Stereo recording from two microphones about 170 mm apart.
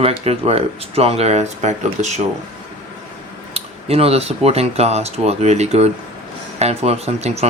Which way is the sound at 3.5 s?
35° right (ahead or behind).